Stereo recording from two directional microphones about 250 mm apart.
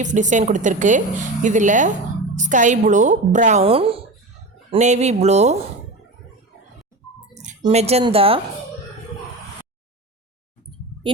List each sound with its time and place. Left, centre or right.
0.0 s a woman's voice: right
7.3 s a woman's voice: right